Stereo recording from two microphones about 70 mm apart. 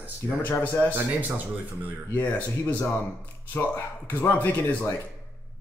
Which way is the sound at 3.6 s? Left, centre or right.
Left.